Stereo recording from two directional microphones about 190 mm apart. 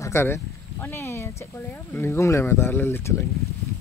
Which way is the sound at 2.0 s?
15° left (ahead or behind).